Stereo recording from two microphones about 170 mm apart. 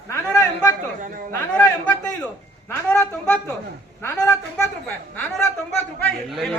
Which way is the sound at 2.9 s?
10° left (ahead or behind).